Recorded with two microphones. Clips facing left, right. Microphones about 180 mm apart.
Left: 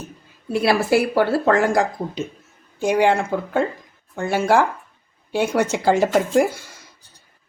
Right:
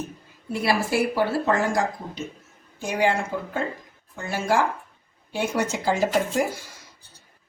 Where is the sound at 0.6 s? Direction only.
75° left (ahead or behind).